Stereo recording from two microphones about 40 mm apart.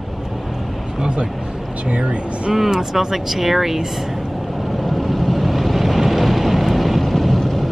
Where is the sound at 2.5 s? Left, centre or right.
Centre.